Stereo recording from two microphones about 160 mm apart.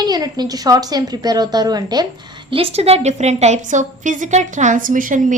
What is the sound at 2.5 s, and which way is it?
A woman's voice, 35° right (ahead or behind).